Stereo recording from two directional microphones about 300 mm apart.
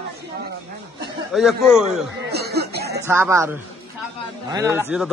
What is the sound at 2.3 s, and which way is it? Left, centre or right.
Speech, right.